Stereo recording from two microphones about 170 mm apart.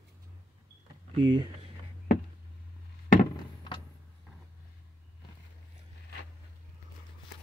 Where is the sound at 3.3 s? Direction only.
25° left (ahead or behind).